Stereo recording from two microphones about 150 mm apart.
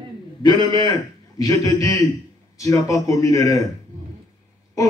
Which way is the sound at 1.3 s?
25° left (ahead or behind).